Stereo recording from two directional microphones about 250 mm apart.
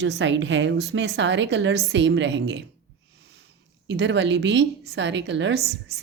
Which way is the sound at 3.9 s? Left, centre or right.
Right.